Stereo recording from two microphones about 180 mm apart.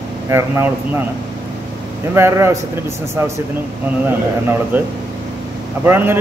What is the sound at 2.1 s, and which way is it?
Speech, 15° right (ahead or behind).